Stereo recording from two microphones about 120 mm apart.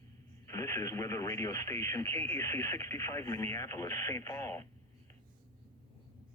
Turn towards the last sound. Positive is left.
turn(degrees=20)  # may be behind; listen again after turning